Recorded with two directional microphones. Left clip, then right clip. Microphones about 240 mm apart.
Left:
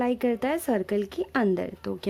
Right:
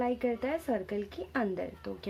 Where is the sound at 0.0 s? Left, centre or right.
Left.